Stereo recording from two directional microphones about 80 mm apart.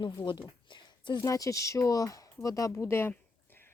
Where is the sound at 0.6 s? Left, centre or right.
Left.